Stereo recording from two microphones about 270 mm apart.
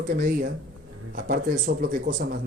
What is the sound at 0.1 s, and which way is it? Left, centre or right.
Speech, right.